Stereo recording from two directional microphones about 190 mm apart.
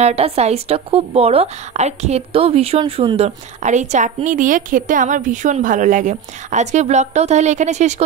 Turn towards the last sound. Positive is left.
turn(degrees=-35)  # may be behind; listen again after turning